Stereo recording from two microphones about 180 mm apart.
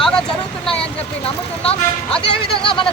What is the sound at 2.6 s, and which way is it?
Speech, 30° left (ahead or behind).